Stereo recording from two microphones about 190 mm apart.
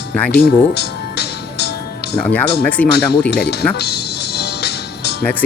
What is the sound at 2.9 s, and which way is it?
Speech, 60° left (ahead or behind).